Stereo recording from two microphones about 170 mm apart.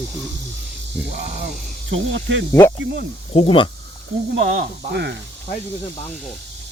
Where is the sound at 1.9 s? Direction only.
90° right.